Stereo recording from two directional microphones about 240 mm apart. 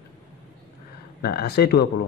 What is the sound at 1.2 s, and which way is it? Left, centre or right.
Speech, left.